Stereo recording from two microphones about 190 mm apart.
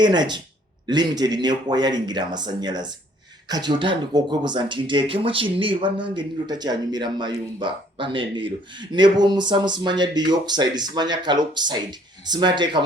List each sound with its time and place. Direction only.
0.0 s speech: 25° right (ahead or behind)